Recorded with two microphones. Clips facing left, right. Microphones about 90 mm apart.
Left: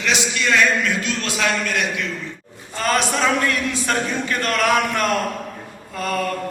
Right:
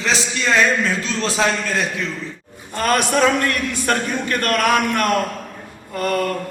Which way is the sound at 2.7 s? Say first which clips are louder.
Right 3 dB; 55° right (ahead or behind).